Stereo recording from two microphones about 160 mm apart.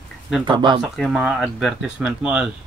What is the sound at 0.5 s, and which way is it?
Speech, 30° right (ahead or behind).